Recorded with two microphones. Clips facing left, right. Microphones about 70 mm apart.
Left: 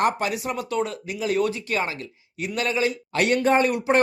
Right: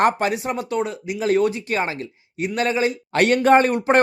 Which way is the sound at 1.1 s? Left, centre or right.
Right.